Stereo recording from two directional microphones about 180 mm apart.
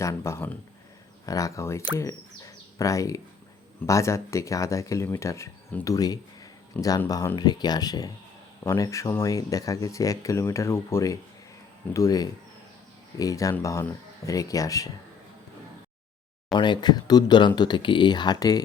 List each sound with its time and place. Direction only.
0.0 s speech: 15° left (ahead or behind)
2.0 s bird: 15° left (ahead or behind)
3.8 s speech: 15° left (ahead or behind)
16.6 s speech: 25° left (ahead or behind)